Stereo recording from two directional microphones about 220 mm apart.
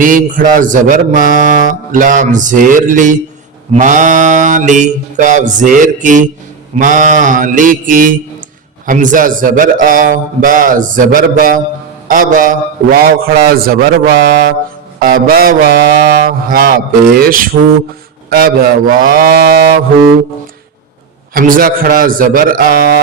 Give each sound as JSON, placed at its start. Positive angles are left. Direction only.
{"t": 0.0, "sound": "mantra", "side_deg": -40}
{"t": 18.3, "sound": "a man's voice", "side_deg": -45}
{"t": 21.3, "sound": "mantra", "side_deg": -40}